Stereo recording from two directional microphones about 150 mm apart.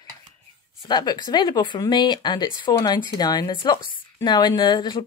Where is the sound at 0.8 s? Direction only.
30° left (ahead or behind).